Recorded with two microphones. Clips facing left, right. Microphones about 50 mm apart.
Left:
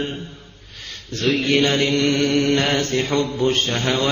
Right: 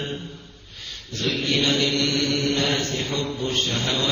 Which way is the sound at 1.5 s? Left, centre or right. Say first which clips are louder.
Left 3 dB; left.